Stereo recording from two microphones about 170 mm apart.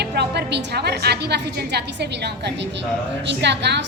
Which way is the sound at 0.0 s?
75° right (ahead or behind).